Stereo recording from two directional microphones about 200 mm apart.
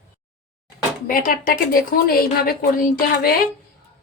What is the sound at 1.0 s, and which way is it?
Speech, 45° left (ahead or behind).